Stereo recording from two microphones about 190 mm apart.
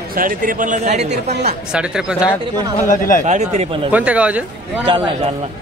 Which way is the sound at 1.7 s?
5° right (ahead or behind).